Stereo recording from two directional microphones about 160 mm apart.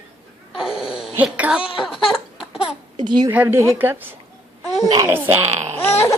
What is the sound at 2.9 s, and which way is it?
Speech, 30° right (ahead or behind).